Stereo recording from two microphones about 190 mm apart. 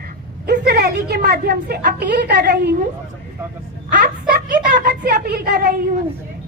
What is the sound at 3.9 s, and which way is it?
A woman's voice, 45° right (ahead or behind).